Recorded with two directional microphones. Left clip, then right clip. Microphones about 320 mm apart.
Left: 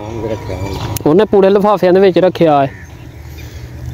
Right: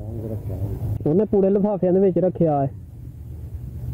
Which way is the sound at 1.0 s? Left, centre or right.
Left.